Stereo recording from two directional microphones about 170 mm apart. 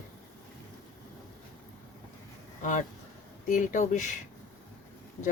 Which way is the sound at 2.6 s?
50° left (ahead or behind).